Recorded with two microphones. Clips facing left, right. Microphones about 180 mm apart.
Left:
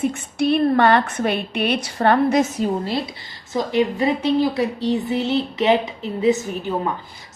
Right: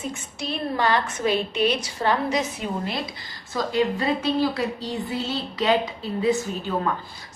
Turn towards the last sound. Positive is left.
turn(degrees=15)  # may be behind; listen again after turning